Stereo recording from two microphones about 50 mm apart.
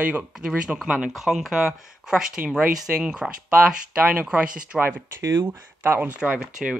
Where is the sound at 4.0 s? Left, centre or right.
Right.